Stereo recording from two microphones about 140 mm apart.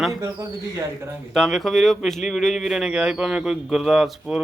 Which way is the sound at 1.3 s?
Centre (ahead or behind).